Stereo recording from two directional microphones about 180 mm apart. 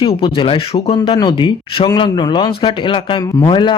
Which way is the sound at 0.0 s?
30° left (ahead or behind).